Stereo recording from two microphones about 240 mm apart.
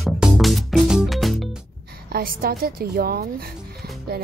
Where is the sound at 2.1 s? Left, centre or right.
Right.